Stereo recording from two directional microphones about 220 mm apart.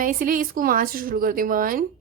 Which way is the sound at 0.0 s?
40° right (ahead or behind).